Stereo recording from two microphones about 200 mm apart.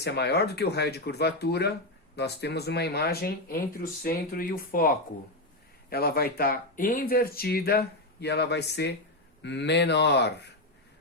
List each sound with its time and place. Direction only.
0.0 s speech: 55° left (ahead or behind)